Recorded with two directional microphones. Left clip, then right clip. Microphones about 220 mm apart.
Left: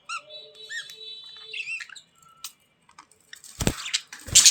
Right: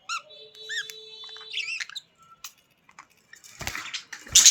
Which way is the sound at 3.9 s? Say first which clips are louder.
Left 7 dB; 45° left (ahead or behind).